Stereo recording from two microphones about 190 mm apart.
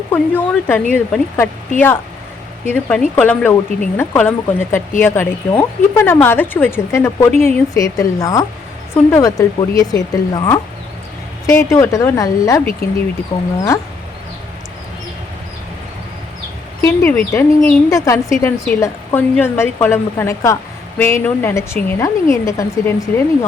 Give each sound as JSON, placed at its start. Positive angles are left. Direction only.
{"t": 0.1, "sound": "speech", "side_deg": 10}
{"t": 2.6, "sound": "speech", "side_deg": 10}
{"t": 13.3, "sound": "speech", "side_deg": 30}
{"t": 16.8, "sound": "speech", "side_deg": 10}